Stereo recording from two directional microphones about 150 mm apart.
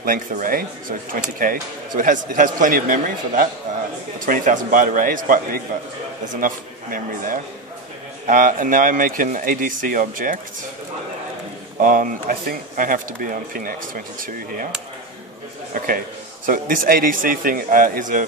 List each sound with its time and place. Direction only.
0.0 s speech: 70° right (ahead or behind)
11.8 s speech: 60° right (ahead or behind)
16.4 s speech: 70° right (ahead or behind)